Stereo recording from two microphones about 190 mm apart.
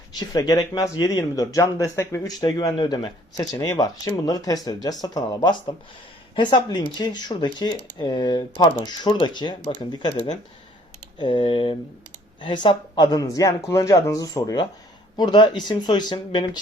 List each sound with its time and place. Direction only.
0.2 s speech: 20° left (ahead or behind)
11.2 s speech: 25° left (ahead or behind)